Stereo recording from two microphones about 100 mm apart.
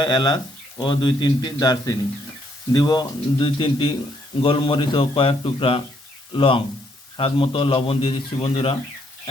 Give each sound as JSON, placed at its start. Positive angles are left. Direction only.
{"t": 0.0, "sound": "a man's voice", "side_deg": 45}